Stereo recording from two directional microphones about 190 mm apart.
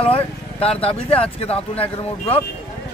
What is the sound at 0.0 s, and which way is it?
Speech, 30° left (ahead or behind).